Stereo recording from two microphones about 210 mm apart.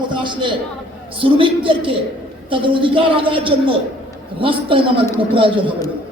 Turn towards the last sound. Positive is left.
turn(degrees=-25)  # may be behind; listen again after turning